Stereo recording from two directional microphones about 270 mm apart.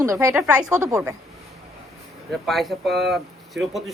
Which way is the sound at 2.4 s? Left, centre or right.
Centre.